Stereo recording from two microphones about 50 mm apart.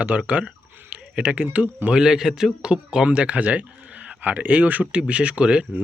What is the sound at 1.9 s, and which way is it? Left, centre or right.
A man's voice, centre.